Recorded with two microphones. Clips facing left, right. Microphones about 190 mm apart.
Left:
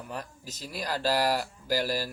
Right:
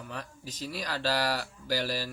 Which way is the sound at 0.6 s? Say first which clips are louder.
Left 2 dB; 45° left (ahead or behind).